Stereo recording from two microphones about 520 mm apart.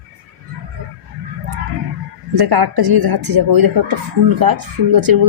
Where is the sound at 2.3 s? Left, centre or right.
Right.